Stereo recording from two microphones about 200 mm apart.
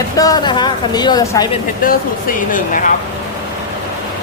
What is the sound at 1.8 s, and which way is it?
Speech, 45° left (ahead or behind).